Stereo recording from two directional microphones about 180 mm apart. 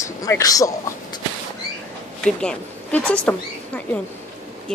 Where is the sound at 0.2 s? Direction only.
20° left (ahead or behind).